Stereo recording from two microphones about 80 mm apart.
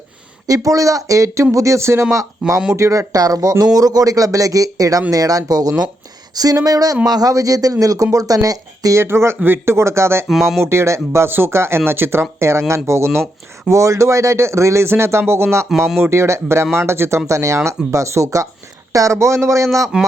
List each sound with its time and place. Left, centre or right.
0.4 s speech: right
2.4 s speech: centre
2.7 s speech: right
9.0 s speech: right
19.8 s speech: centre